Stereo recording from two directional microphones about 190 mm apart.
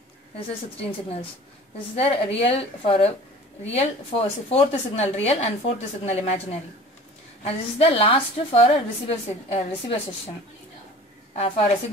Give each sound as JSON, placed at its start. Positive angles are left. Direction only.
{"t": 2.0, "sound": "a woman's voice", "side_deg": 30}
{"t": 11.3, "sound": "a woman's voice", "side_deg": 30}